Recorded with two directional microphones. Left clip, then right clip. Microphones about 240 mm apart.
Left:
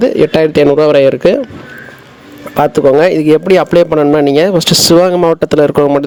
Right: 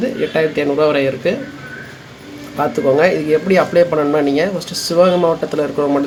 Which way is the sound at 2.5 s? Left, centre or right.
Left.